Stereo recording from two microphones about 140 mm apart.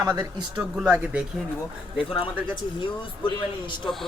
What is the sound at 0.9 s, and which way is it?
Speech, 10° right (ahead or behind).